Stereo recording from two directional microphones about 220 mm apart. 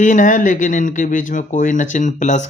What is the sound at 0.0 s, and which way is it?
Speech, 35° left (ahead or behind).